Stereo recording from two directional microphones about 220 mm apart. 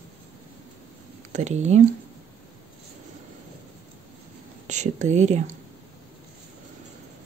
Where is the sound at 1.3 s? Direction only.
30° right (ahead or behind).